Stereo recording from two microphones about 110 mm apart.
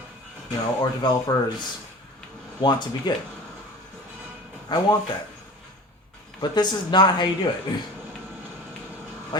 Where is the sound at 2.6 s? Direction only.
45° left (ahead or behind).